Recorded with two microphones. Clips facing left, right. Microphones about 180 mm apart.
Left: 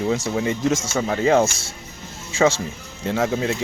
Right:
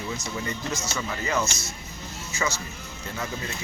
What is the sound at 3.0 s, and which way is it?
Speech, 80° left.